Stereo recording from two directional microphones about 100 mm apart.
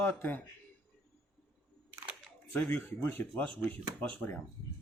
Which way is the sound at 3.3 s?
10° left (ahead or behind).